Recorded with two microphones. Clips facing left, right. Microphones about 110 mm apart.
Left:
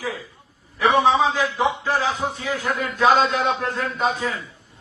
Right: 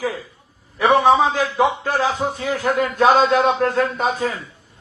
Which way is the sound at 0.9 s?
50° right (ahead or behind).